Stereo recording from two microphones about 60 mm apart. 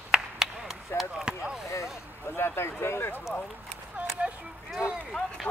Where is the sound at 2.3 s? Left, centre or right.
Left.